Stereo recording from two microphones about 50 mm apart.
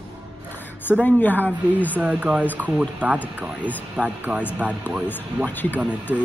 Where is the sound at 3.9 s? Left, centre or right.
Right.